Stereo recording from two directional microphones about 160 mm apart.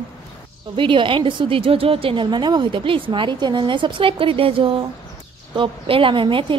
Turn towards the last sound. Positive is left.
turn(degrees=-30)  # may be behind; listen again after turning